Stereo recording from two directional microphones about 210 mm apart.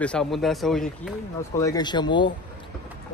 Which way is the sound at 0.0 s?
5° left (ahead or behind).